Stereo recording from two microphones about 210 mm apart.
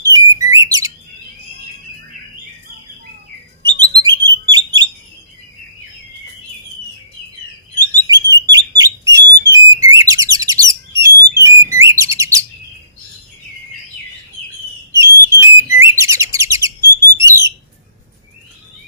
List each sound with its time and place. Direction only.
0.0 s bird: 15° right (ahead or behind)
3.7 s bird: 20° right (ahead or behind)
4.1 s bird: 60° right (ahead or behind)
4.5 s bird: 20° right (ahead or behind)
8.0 s bird: 15° right (ahead or behind)
14.9 s whistle: 15° right (ahead or behind)
15.8 s bird: 15° right (ahead or behind)
17.2 s alarm: 15° right (ahead or behind)